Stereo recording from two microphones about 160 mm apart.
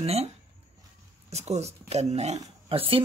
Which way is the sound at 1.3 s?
45° right (ahead or behind).